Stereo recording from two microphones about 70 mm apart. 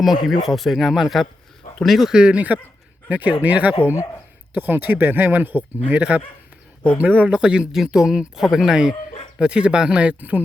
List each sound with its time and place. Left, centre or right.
0.0 s speech: centre
2.1 s speech: centre